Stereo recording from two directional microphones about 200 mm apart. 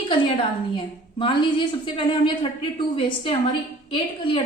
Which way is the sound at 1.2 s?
25° left (ahead or behind).